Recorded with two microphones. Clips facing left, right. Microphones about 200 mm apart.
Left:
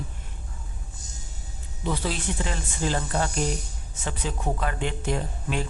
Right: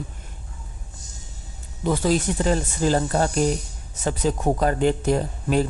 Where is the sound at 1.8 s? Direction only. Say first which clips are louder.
Right 8 dB; 45° right (ahead or behind).